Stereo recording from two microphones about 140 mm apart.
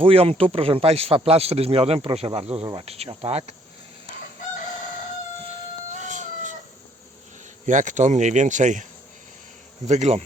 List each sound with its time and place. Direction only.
0.0 s speech: 40° right (ahead or behind)
6.0 s cat: 60° right (ahead or behind)
7.7 s speech: 65° right (ahead or behind)